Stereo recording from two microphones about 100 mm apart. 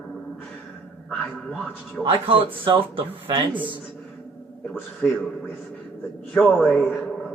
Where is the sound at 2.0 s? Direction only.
60° right (ahead or behind).